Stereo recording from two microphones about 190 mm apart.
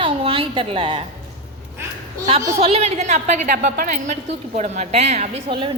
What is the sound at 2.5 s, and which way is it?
A woman's voice, 30° right (ahead or behind).